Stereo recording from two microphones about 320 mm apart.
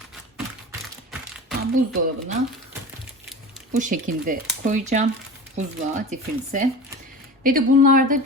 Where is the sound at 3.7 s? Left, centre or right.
Right.